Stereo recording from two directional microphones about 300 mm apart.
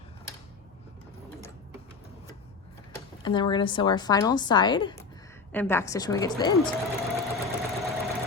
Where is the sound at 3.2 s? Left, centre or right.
Centre.